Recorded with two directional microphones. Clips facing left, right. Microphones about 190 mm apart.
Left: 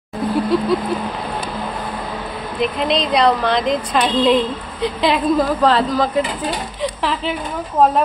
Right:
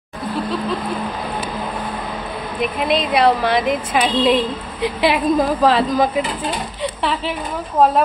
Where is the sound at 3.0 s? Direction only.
5° right (ahead or behind).